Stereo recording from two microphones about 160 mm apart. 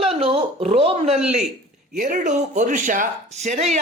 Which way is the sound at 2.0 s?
55° right (ahead or behind).